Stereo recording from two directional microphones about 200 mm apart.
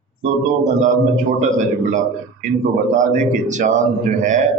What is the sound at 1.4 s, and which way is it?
Speech, 40° right (ahead or behind).